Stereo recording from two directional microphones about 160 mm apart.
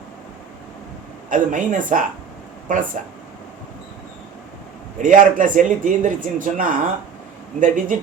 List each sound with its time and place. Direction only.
1.3 s speech: 55° right (ahead or behind)
4.9 s speech: 55° right (ahead or behind)